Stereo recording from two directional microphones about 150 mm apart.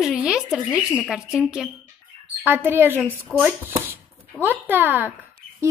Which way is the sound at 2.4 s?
15° right (ahead or behind).